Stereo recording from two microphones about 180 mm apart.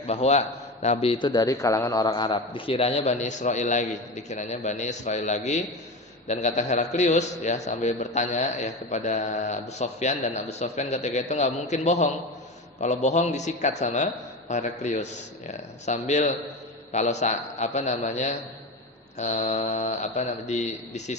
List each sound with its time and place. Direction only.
0.1 s a man's voice: 35° left (ahead or behind)